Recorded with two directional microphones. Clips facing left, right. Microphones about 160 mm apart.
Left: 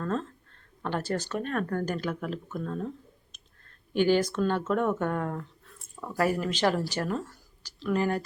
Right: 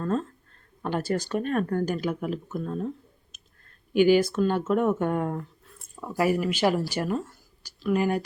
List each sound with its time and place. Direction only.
0.0 s speech: 10° right (ahead or behind)
3.9 s speech: 10° right (ahead or behind)